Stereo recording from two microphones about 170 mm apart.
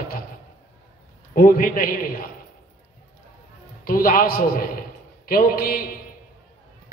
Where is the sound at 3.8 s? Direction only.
55° left (ahead or behind).